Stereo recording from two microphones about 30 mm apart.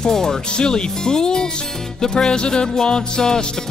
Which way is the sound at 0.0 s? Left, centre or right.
Centre.